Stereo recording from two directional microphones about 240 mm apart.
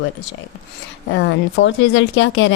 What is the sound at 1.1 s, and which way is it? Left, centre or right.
A woman's voice, left.